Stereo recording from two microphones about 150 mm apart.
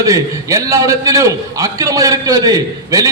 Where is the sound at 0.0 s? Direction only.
20° right (ahead or behind).